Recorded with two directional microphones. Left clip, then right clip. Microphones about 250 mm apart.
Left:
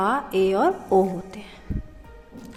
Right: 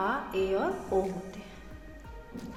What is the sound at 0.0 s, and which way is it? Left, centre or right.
A woman's voice, left.